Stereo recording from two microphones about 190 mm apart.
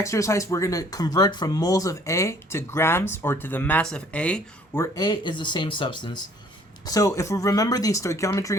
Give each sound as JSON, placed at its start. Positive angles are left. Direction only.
{"t": 0.0, "sound": "speech", "side_deg": 15}